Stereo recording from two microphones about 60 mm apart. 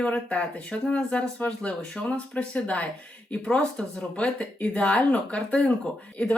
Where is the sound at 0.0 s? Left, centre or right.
Left.